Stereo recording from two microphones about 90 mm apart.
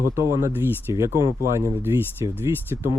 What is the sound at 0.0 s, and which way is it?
Speech, 35° right (ahead or behind).